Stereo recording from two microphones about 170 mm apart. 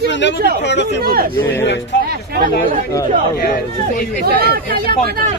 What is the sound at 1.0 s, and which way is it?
Speech, 60° right (ahead or behind).